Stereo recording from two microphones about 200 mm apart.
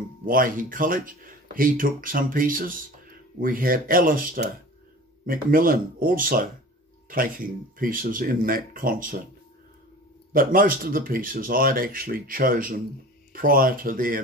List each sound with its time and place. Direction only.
0.2 s speech: 45° right (ahead or behind)
10.3 s speech: 45° right (ahead or behind)